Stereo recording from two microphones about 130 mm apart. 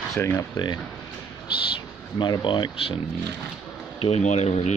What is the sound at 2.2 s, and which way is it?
Speech, 35° left (ahead or behind).